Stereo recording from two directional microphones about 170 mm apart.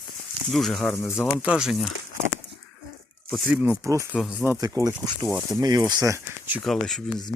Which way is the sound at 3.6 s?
20° right (ahead or behind).